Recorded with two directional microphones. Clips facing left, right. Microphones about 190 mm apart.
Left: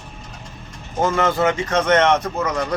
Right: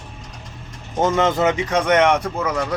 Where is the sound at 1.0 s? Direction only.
20° right (ahead or behind).